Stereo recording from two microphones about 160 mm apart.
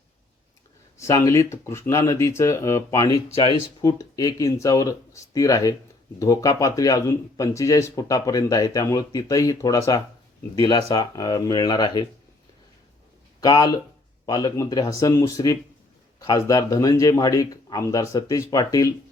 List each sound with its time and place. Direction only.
0.9 s speech: 20° left (ahead or behind)
13.4 s speech: 25° left (ahead or behind)